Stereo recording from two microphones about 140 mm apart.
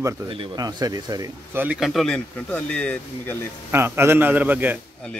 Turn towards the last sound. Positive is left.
turn(degrees=-10)  # may be behind; listen again after turning